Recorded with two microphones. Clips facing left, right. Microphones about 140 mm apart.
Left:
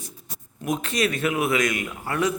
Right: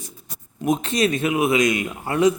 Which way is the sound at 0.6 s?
25° right (ahead or behind).